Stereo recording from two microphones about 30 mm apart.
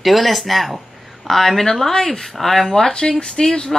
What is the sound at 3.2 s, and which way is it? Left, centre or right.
Speech, left.